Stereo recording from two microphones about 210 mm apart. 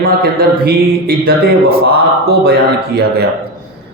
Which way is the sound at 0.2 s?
45° right (ahead or behind).